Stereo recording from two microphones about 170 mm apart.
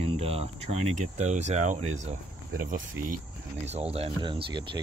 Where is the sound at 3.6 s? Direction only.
40° right (ahead or behind).